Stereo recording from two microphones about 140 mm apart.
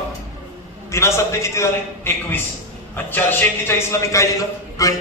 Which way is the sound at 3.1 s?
15° left (ahead or behind).